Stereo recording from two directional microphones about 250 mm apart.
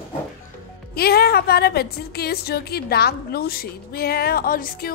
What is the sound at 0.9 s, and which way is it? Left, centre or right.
A woman's voice, left.